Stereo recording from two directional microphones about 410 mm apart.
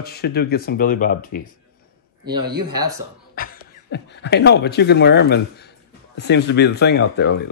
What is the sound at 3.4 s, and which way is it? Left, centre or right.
Beatboxing, left.